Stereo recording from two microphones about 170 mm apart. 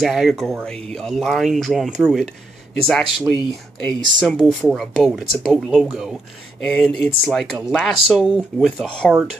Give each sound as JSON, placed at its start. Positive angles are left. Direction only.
{"t": 0.0, "sound": "speech", "side_deg": 0}
{"t": 3.1, "sound": "speech", "side_deg": 30}
{"t": 3.8, "sound": "speech", "side_deg": 5}